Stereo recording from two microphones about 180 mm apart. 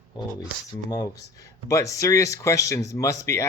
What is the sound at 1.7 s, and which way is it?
Speech, 15° left (ahead or behind).